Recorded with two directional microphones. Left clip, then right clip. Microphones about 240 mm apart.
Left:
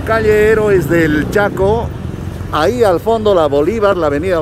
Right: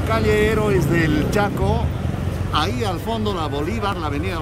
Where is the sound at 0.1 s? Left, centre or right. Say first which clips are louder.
Left 9 dB; centre.